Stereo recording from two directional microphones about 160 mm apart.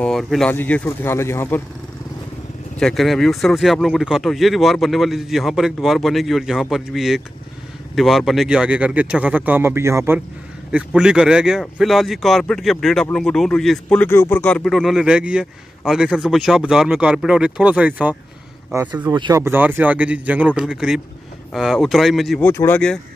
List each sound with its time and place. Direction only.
0.0 s speech: centre (ahead or behind)
2.8 s speech: centre (ahead or behind)
19.0 s speech: 25° right (ahead or behind)
19.4 s speech: 15° right (ahead or behind)
22.4 s speech: 15° left (ahead or behind)